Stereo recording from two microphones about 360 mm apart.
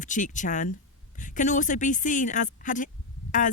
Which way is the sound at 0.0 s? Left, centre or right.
Left.